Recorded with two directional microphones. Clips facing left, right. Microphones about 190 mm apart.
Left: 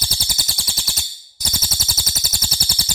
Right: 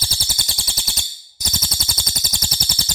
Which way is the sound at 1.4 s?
5° left (ahead or behind).